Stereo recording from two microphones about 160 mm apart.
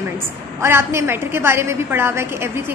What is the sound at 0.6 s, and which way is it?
A woman's voice, 15° right (ahead or behind).